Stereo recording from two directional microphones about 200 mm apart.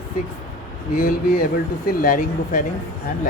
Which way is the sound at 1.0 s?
45° left (ahead or behind).